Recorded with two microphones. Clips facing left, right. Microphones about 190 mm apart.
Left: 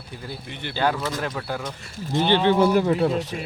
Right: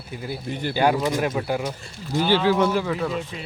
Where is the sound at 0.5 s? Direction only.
40° right (ahead or behind).